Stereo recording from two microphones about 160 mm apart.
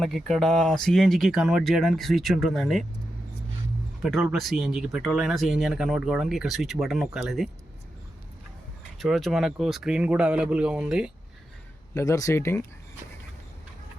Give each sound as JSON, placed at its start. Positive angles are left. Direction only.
{"t": 0.0, "sound": "speech", "side_deg": 0}
{"t": 4.0, "sound": "speech", "side_deg": 0}
{"t": 9.0, "sound": "speech", "side_deg": 0}
{"t": 11.9, "sound": "speech", "side_deg": 20}